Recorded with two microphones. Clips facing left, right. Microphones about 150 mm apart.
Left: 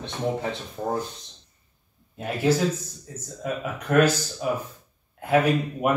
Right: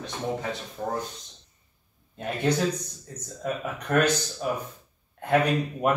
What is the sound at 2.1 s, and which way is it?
Speech, 5° left (ahead or behind).